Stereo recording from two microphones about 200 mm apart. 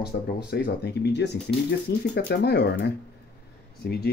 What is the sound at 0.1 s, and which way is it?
Speech, 50° left (ahead or behind).